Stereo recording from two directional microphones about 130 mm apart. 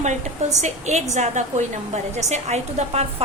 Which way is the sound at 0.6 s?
60° right (ahead or behind).